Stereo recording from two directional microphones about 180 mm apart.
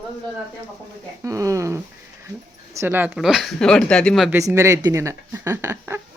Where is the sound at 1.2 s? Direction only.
15° right (ahead or behind); by 4.3 s 5° left (ahead or behind).